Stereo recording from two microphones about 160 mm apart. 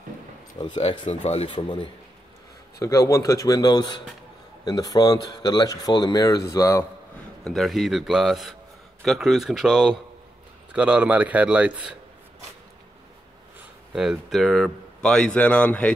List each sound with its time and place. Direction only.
0.6 s speech: 30° left (ahead or behind)
2.8 s speech: 20° left (ahead or behind)
7.4 s a man's voice: centre (ahead or behind)
13.9 s speech: centre (ahead or behind)